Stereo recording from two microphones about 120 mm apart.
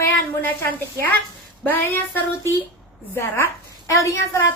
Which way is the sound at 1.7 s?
15° left (ahead or behind).